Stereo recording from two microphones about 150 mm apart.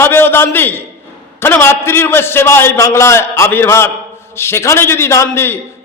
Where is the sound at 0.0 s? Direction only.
15° left (ahead or behind).